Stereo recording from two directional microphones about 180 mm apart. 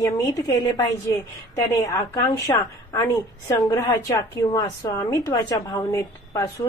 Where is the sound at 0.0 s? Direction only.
20° left (ahead or behind).